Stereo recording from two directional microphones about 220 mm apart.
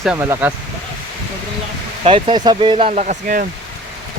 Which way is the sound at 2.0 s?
25° right (ahead or behind).